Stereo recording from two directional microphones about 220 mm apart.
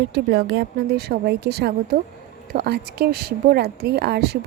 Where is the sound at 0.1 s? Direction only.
50° right (ahead or behind).